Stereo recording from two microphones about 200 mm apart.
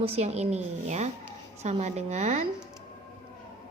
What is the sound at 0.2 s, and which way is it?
A child's voice, 30° right (ahead or behind).